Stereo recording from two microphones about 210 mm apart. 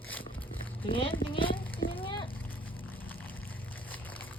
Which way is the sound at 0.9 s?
25° left (ahead or behind).